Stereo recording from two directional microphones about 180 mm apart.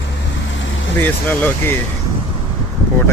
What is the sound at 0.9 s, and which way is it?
Speech, 10° left (ahead or behind).